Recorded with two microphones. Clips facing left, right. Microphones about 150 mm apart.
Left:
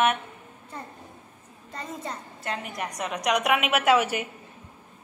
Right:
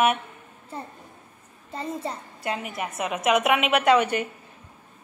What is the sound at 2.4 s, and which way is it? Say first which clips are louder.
A woman's voice: right 3 dB; 5° right (ahead or behind).